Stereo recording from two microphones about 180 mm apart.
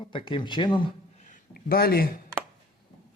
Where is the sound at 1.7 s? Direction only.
60° left (ahead or behind).